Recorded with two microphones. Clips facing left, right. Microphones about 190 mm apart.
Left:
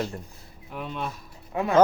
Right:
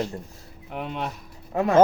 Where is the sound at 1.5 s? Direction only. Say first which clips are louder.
Right 3 dB; 45° right (ahead or behind).